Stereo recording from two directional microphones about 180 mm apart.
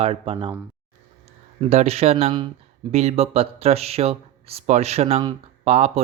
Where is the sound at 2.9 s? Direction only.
35° right (ahead or behind).